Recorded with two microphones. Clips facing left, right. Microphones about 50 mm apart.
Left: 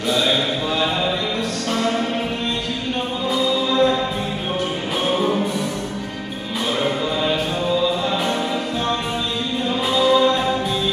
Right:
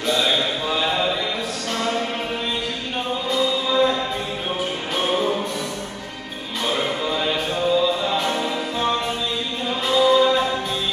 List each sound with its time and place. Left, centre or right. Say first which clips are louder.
0.1 s a sound: left 1 dB; centre
3.3 s music: left 2 dB; centre
4.9 s music: left 1 dB; centre
6.8 s music: left 2 dB; centre
9.8 s music: even; centre